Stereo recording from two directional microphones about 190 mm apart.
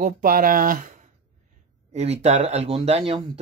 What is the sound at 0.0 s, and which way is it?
Speech, 45° right (ahead or behind).